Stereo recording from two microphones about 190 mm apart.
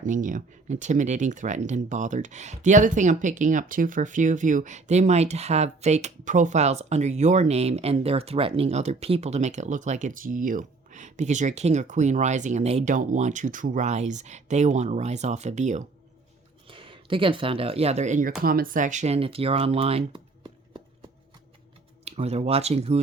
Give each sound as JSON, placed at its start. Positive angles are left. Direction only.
{"t": 0.0, "sound": "speech", "side_deg": -40}
{"t": 16.6, "sound": "speech", "side_deg": -25}
{"t": 22.0, "sound": "speech", "side_deg": -35}